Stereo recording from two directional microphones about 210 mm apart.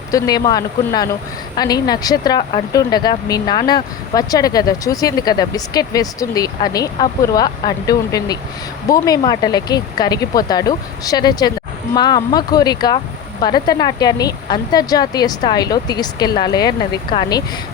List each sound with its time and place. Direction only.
0.1 s speech: 20° left (ahead or behind)